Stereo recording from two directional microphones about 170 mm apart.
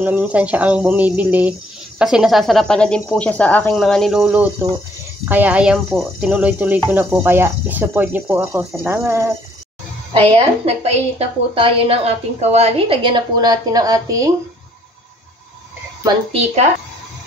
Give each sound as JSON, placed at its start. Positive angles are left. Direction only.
{"t": 0.0, "sound": "speech", "side_deg": -10}
{"t": 10.1, "sound": "a woman's voice", "side_deg": -35}
{"t": 16.3, "sound": "a woman's voice", "side_deg": -35}